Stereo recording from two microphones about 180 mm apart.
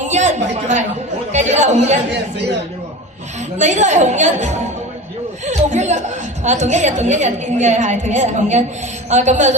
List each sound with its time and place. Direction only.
0.0 s a woman's voice: 40° right (ahead or behind)
3.6 s a woman's voice: 40° right (ahead or behind)